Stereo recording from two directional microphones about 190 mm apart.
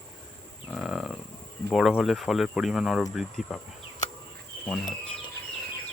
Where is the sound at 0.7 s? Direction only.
Centre (ahead or behind).